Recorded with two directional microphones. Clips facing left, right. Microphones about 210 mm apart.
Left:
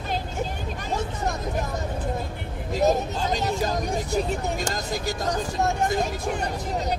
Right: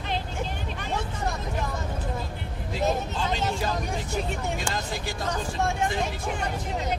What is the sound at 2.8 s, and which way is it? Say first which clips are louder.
Speech: left 5 dB; 40° left (ahead or behind).